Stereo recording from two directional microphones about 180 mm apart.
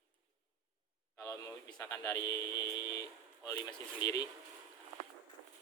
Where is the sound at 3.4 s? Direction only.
20° left (ahead or behind).